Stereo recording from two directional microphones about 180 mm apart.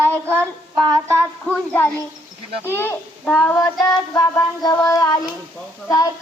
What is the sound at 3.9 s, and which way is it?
Child singing, 20° left (ahead or behind).